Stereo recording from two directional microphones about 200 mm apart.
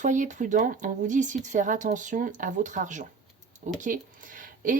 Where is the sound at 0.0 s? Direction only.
40° right (ahead or behind).